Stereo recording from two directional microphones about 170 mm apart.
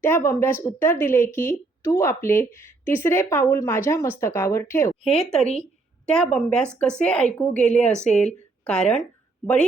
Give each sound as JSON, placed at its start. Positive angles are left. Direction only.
{"t": 0.0, "sound": "speech", "side_deg": 15}
{"t": 5.0, "sound": "a woman's voice", "side_deg": 5}
{"t": 8.1, "sound": "a woman's voice", "side_deg": 40}
{"t": 8.6, "sound": "speech", "side_deg": 5}